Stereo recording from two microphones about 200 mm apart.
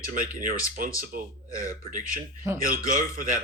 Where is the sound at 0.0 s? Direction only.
40° right (ahead or behind).